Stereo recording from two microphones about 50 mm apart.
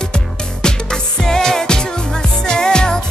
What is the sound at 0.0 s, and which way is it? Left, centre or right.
Music, centre.